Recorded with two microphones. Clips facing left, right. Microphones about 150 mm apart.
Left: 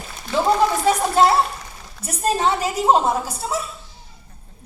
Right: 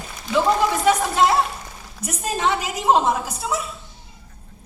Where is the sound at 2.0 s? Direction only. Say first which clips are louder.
Left 3 dB; 35° left (ahead or behind).